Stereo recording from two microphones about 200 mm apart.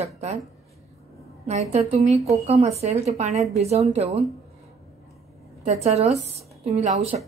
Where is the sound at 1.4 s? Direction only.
35° right (ahead or behind).